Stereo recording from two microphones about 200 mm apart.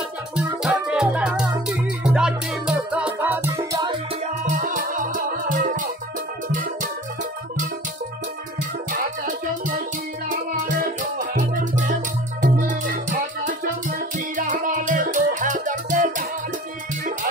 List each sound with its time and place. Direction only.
0.4 s music: 5° right (ahead or behind); by 4.0 s 20° right (ahead or behind)
4.5 s music: 40° right (ahead or behind)
8.9 s music: 45° right (ahead or behind)